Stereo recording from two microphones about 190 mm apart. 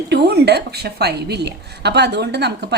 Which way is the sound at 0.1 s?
60° right (ahead or behind).